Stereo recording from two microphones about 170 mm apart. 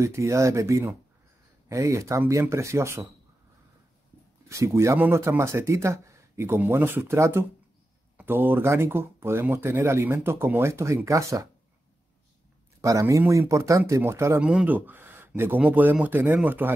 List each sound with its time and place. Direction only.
0.0 s speech: 15° right (ahead or behind)
4.5 s speech: 15° right (ahead or behind)
12.8 s speech: 20° right (ahead or behind)
14.4 s speech: 5° right (ahead or behind)